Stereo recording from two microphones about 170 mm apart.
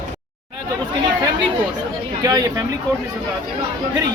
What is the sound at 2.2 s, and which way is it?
Speech, 20° right (ahead or behind).